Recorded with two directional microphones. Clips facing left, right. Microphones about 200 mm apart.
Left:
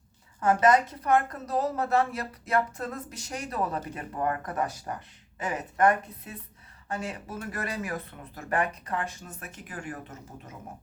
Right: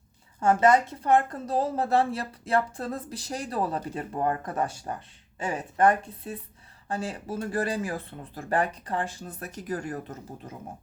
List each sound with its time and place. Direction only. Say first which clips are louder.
0.3 s speech: right 1 dB; 25° right (ahead or behind)